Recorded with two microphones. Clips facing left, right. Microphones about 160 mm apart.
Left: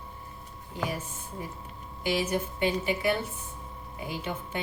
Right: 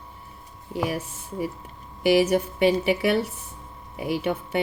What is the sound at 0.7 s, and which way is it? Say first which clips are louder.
Speech: right 6 dB; 70° right (ahead or behind).